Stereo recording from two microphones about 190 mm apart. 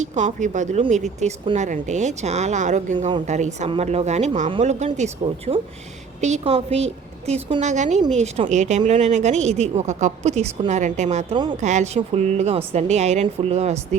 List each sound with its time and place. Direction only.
0.0 s speech: 40° right (ahead or behind)